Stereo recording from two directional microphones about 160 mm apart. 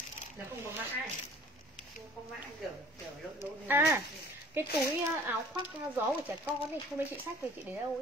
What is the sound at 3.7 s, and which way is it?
Speech, 20° right (ahead or behind).